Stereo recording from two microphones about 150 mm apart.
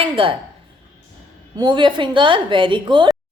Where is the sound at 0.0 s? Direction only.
35° right (ahead or behind).